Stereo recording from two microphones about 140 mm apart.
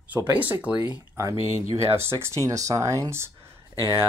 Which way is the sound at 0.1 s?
10° right (ahead or behind).